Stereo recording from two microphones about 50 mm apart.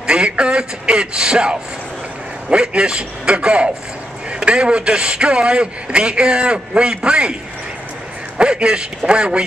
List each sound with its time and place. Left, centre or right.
0.0 s a man's voice: centre
8.4 s a man's voice: centre